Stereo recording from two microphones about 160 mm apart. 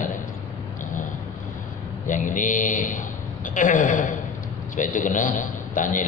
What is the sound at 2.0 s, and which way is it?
A man's voice, 55° left (ahead or behind).